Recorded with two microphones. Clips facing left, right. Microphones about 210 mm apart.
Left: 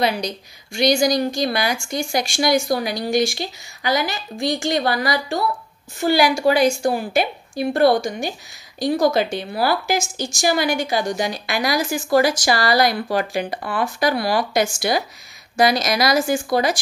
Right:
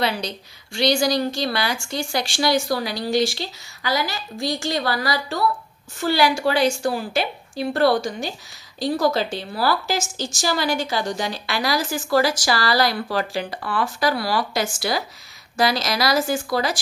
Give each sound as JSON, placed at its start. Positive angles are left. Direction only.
{"t": 0.7, "sound": "a woman's voice", "side_deg": 15}